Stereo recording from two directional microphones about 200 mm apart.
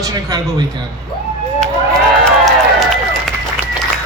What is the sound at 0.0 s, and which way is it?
Speech, 15° right (ahead or behind).